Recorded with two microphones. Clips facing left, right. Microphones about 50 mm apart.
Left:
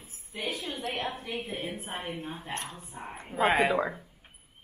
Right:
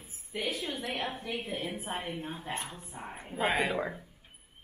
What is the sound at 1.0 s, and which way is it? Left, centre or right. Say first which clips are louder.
A woman's voice: left 1 dB; left.